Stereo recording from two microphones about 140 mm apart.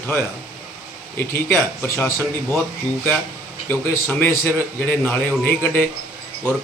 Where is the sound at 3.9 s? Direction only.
10° left (ahead or behind).